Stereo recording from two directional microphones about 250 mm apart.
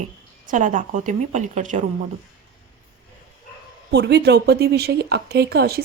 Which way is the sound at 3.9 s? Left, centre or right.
Right.